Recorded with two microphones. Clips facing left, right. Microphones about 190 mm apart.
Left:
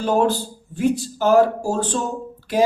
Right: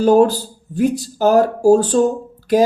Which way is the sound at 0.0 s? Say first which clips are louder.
Right 7 dB; 40° right (ahead or behind).